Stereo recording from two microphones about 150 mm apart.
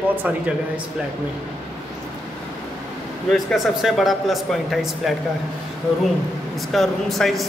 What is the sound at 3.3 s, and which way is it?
A man's voice, centre (ahead or behind).